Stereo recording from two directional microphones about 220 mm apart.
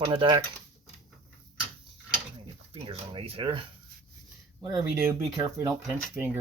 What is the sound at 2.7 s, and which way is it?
Speech, 25° right (ahead or behind).